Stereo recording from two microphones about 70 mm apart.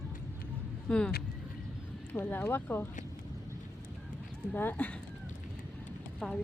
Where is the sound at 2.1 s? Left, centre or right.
Left.